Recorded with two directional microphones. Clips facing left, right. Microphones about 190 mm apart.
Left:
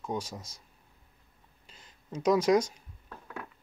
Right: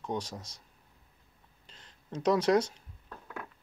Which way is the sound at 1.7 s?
10° left (ahead or behind).